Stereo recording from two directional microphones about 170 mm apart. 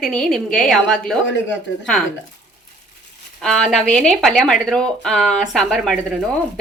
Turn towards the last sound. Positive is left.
turn(degrees=0)  # may be behind; listen again after turning